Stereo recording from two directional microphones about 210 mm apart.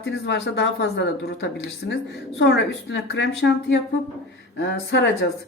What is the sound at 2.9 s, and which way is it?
A woman's voice, 55° left (ahead or behind).